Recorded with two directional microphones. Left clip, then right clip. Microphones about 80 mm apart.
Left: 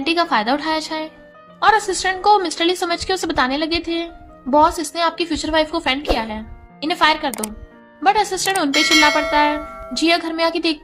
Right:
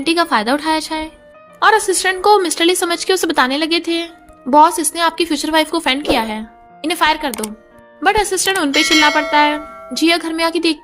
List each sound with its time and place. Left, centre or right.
0.0 s a woman's voice: right
6.8 s a woman's voice: right
9.6 s music: centre
9.9 s a woman's voice: right